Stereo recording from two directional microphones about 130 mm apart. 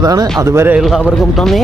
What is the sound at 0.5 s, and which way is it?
Speech, 15° right (ahead or behind).